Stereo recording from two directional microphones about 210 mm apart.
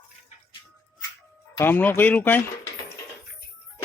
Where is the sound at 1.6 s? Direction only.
10° left (ahead or behind).